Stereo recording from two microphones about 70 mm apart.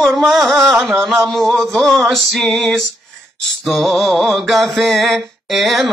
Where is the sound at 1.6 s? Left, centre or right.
Right.